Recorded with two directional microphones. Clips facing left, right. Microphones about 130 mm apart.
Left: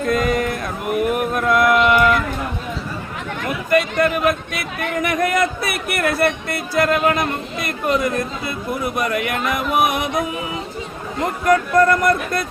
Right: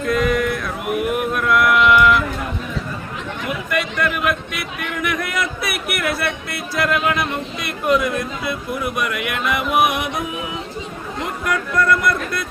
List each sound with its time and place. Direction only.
0.1 s music: 45° left (ahead or behind)
1.4 s a sound: 40° left (ahead or behind)
3.7 s a sound: 40° left (ahead or behind)
6.0 s music: 45° left (ahead or behind)
9.0 s speech: 40° left (ahead or behind)
11.4 s speech: 40° left (ahead or behind)